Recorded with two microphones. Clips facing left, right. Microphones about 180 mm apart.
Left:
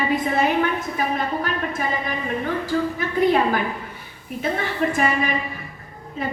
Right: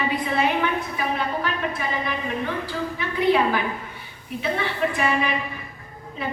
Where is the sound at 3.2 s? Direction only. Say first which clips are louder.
Left 1 dB; 45° left (ahead or behind).